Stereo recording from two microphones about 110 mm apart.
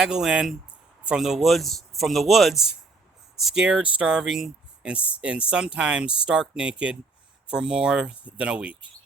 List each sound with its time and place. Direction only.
0.0 s a man's voice: 5° right (ahead or behind)